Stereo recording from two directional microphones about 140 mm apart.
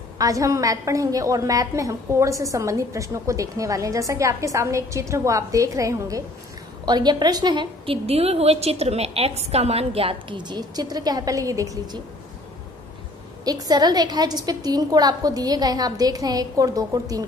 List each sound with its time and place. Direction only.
0.2 s a woman's voice: 25° right (ahead or behind)
13.4 s a woman's voice: 30° right (ahead or behind)